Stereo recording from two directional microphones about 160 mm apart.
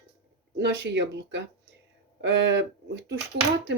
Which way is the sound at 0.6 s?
90° right.